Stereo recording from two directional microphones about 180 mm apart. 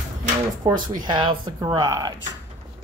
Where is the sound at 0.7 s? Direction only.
50° right (ahead or behind).